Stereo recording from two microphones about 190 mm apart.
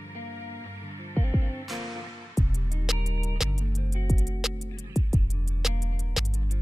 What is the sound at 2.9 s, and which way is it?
Music, centre (ahead or behind).